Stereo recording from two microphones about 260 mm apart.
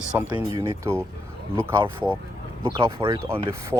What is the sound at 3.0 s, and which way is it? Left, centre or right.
Speech, centre.